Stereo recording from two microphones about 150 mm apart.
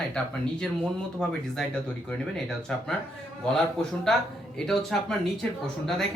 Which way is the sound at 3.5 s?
5° left (ahead or behind).